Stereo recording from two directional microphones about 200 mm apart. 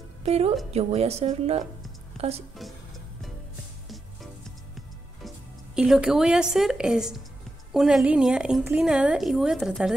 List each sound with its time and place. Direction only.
0.2 s a woman's voice: 30° right (ahead or behind)
5.8 s a woman's voice: 5° right (ahead or behind)